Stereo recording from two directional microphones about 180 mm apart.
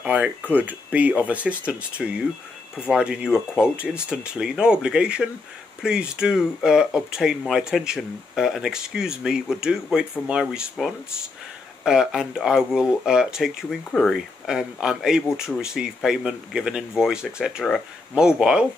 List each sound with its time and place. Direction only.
0.0 s speech: 10° right (ahead or behind)